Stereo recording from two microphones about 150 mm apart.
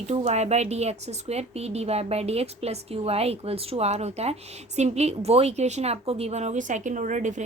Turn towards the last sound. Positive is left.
turn(degrees=-55)  # may be behind; listen again after turning